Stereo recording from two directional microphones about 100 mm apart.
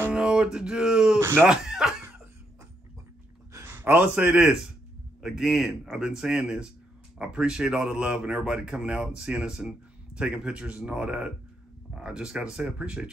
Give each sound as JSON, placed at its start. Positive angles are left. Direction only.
{"t": 0.1, "sound": "music", "side_deg": -10}
{"t": 1.2, "sound": "speech", "side_deg": -20}
{"t": 1.5, "sound": "a sound", "side_deg": -5}
{"t": 3.5, "sound": "a man's voice", "side_deg": -20}